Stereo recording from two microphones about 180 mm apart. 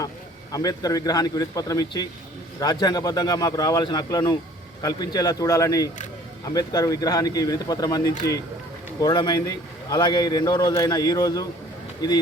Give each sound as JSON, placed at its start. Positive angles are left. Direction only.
{"t": 0.5, "sound": "a man's voice", "side_deg": 20}